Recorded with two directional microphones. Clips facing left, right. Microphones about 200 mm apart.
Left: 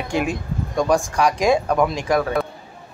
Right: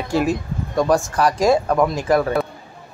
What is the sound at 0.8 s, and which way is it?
Speech, centre (ahead or behind).